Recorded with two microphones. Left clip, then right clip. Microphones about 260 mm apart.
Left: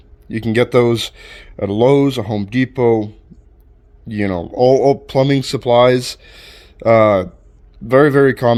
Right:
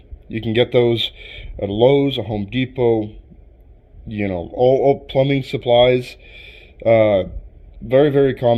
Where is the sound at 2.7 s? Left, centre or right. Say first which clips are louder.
Left 3 dB; left.